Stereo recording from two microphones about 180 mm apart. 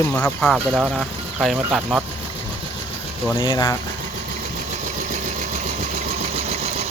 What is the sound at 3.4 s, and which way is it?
Speech, 25° left (ahead or behind).